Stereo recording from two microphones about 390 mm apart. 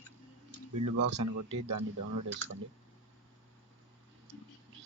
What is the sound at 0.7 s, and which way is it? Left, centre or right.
Speech, right.